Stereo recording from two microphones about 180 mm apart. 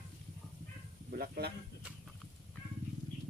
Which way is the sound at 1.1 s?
60° right (ahead or behind).